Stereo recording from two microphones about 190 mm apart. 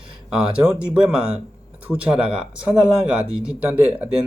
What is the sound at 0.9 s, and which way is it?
Speech, 5° right (ahead or behind).